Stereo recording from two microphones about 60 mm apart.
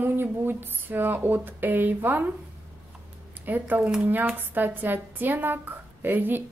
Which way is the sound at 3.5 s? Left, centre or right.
Right.